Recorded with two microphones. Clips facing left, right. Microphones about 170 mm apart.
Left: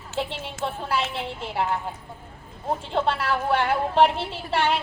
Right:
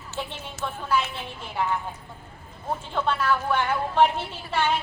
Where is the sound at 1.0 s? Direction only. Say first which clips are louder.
Left 5 dB; 80° left.